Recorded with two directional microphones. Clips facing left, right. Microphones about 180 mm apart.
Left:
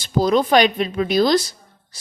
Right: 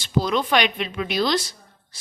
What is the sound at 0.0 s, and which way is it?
Speech, 40° left (ahead or behind).